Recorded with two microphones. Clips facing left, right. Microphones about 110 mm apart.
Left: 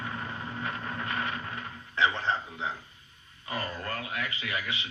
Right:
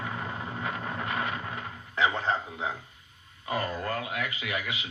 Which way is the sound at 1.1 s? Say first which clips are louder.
Right 1 dB; 45° right (ahead or behind).